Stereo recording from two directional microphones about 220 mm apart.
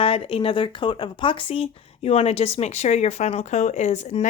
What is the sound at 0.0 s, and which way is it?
Speech, 25° left (ahead or behind).